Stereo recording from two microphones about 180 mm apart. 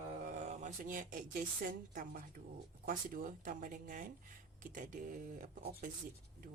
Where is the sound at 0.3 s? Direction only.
45° right (ahead or behind).